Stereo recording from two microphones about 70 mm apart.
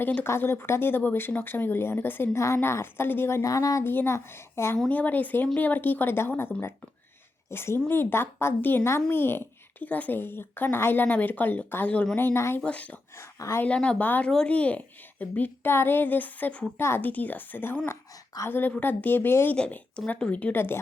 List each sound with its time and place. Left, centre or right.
0.0 s a woman's voice: left
0.3 s speech: left
2.3 s speech: left
3.4 s speech: left
3.8 s speech: left
4.9 s a woman's voice: left
7.5 s a woman's voice: left
12.5 s a woman's voice: centre
13.1 s speech: left
13.7 s a woman's voice: centre
16.7 s speech: left
17.0 s a woman's voice: left
19.5 s a woman's voice: centre